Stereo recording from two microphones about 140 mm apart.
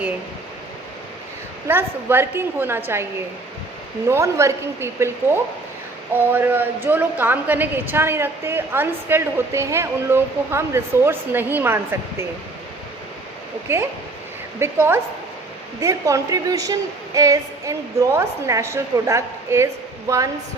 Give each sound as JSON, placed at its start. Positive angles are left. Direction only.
{"t": 1.6, "sound": "a woman's voice", "side_deg": -15}
{"t": 13.7, "sound": "a woman's voice", "side_deg": -20}